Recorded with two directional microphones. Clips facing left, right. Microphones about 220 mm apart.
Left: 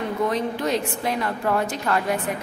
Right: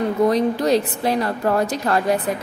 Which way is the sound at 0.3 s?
35° right (ahead or behind).